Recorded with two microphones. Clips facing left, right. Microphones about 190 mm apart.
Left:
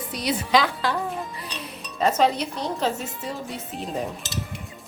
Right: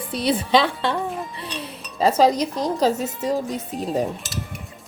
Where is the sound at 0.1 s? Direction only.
30° right (ahead or behind).